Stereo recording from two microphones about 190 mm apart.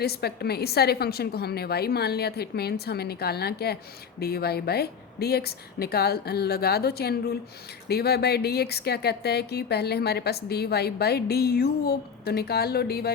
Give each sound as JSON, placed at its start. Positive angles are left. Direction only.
{"t": 0.0, "sound": "speech", "side_deg": 55}